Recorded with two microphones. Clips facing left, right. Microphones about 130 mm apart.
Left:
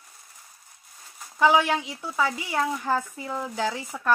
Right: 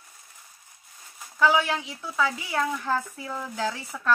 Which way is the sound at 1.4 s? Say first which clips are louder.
Left 2 dB; 15° left (ahead or behind).